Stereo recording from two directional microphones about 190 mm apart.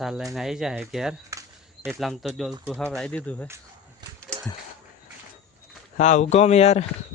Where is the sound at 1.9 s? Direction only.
Centre (ahead or behind).